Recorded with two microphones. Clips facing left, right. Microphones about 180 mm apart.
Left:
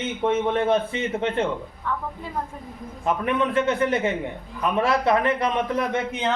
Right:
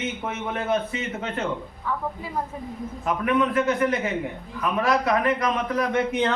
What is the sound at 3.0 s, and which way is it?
A man's voice, 30° left (ahead or behind).